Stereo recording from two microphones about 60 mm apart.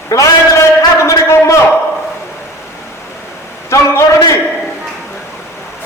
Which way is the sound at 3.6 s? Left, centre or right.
Left.